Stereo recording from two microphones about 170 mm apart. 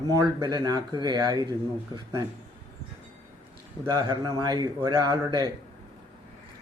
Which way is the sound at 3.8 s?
25° right (ahead or behind).